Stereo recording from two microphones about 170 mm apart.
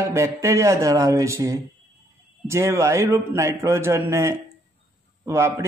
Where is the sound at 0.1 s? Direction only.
15° right (ahead or behind).